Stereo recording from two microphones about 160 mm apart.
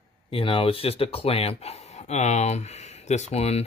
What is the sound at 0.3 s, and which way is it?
Speech, 35° left (ahead or behind).